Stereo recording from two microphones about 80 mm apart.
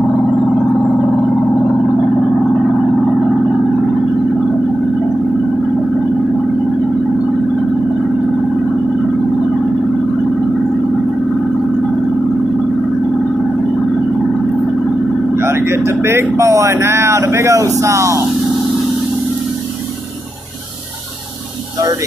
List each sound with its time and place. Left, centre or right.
15.3 s vehicle: right
17.7 s speech: right